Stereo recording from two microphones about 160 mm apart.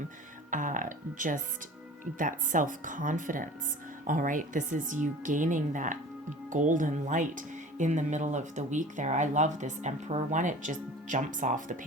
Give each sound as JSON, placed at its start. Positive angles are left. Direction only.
{"t": 0.5, "sound": "speech", "side_deg": -55}